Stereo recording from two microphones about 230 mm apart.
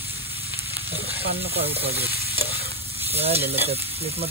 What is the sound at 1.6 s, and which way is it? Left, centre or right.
Frying, right.